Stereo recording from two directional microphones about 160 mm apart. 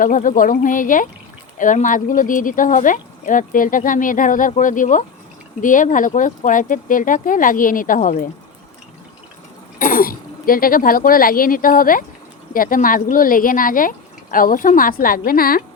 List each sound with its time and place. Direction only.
0.0 s speech: 55° left (ahead or behind)
9.7 s speech: 60° left (ahead or behind)